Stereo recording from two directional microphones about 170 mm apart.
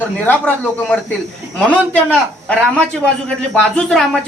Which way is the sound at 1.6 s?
10° left (ahead or behind).